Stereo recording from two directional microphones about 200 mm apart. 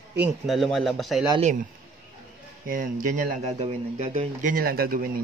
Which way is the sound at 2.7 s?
45° right (ahead or behind).